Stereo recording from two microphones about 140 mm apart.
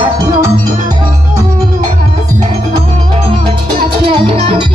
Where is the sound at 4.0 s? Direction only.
40° right (ahead or behind).